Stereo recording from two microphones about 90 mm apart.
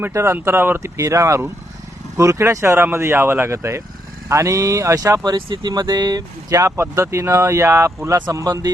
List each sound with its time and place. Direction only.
0.0 s speech: 30° right (ahead or behind)
0.9 s speech: 35° right (ahead or behind)